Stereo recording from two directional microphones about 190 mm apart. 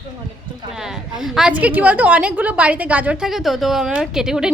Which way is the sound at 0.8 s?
Centre (ahead or behind).